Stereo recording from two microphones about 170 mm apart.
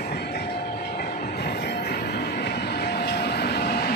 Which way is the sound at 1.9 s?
70° left (ahead or behind).